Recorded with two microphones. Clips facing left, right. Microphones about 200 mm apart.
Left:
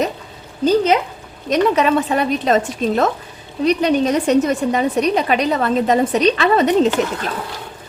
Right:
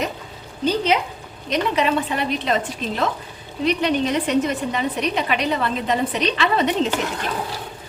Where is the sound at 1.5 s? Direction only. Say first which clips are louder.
Left 5 dB; 45° left (ahead or behind).